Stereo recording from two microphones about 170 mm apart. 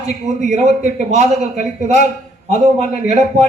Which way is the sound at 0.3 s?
45° right (ahead or behind).